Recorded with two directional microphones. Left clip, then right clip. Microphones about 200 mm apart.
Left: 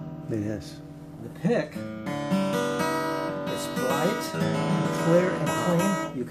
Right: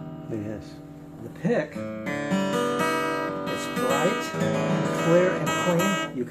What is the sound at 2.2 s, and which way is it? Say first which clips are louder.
Music: right 1 dB; 15° right (ahead or behind).